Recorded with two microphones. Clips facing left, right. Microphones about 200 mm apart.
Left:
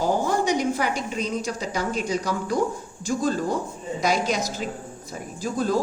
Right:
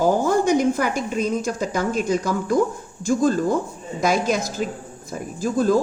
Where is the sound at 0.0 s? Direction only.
50° right (ahead or behind).